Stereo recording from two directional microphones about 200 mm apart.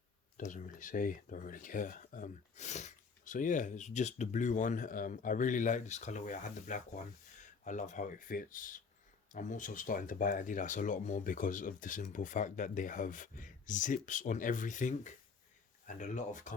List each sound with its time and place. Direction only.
0.3 s speech: 40° left (ahead or behind)